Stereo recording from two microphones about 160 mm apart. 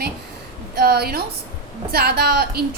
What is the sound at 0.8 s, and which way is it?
A woman's voice, 85° right.